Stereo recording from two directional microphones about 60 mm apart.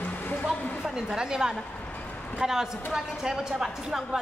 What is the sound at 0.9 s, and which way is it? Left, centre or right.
A woman's voice, centre.